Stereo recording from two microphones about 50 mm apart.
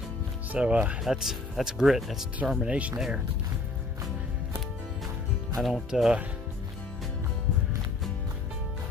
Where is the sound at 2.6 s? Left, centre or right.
Right.